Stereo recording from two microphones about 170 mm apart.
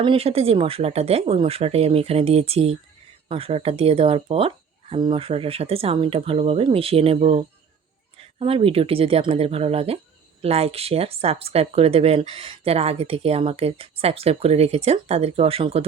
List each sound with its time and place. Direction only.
0.0 s speech: 35° right (ahead or behind)